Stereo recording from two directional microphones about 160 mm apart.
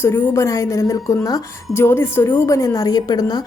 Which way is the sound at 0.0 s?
15° left (ahead or behind).